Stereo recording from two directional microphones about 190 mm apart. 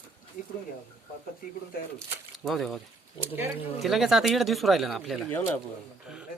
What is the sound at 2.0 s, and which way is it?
Speech, centre (ahead or behind).